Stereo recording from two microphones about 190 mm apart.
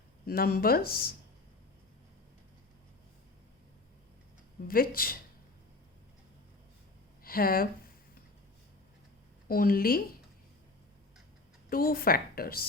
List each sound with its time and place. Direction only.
0.3 s speech: 50° left (ahead or behind)
4.7 s speech: 50° left (ahead or behind)
7.3 s speech: 50° left (ahead or behind)
9.5 s speech: 50° left (ahead or behind)
11.7 s speech: 50° left (ahead or behind)